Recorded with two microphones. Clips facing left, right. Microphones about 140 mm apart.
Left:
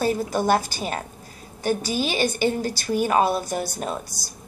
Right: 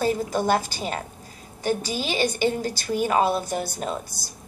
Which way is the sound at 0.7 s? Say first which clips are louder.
Left 1 dB; 25° right (ahead or behind).